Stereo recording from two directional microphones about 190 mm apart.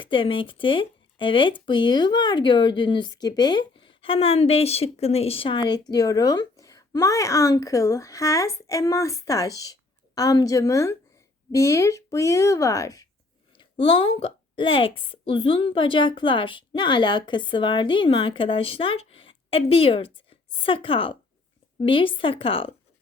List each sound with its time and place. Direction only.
0.0 s a woman's voice: 25° left (ahead or behind)
13.6 s a woman's voice: 30° left (ahead or behind)